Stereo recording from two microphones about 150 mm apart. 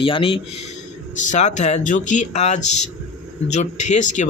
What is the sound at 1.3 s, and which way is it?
A man's voice, 50° left (ahead or behind).